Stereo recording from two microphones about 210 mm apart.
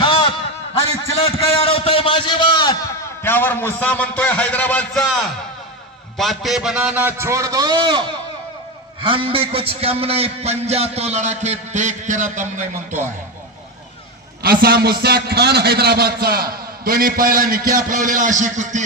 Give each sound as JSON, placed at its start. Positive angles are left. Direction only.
{"t": 0.0, "sound": "a sound", "side_deg": 25}
{"t": 1.1, "sound": "a man's voice", "side_deg": 30}
{"t": 14.4, "sound": "a man's voice", "side_deg": -45}